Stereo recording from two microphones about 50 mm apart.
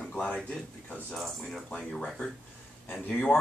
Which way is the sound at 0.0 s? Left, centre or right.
Centre.